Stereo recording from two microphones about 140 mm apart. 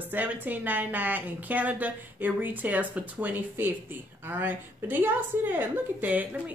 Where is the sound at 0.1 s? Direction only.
10° right (ahead or behind).